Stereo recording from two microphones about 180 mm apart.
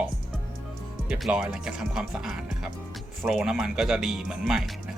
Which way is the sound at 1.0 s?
5° right (ahead or behind).